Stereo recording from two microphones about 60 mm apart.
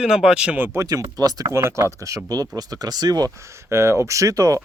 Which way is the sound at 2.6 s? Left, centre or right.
Right.